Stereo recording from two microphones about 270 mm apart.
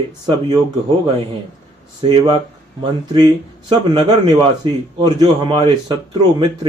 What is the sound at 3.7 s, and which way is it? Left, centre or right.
Speech, centre.